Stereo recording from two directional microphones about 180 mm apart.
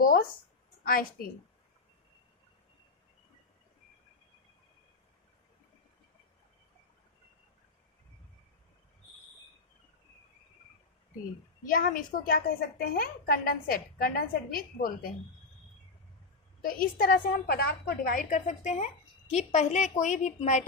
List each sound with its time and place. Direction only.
0.0 s a sound: 50° left (ahead or behind)
0.9 s a woman's voice: 50° left (ahead or behind)
11.6 s a woman's voice: 50° left (ahead or behind)
16.6 s a woman's voice: 50° left (ahead or behind)